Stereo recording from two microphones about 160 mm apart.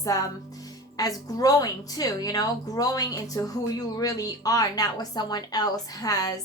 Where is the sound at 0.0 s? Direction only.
20° left (ahead or behind).